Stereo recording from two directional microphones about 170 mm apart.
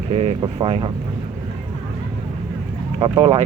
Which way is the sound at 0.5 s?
30° right (ahead or behind).